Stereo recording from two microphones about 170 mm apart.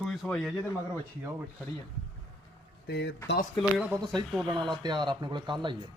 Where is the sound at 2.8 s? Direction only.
75° left (ahead or behind).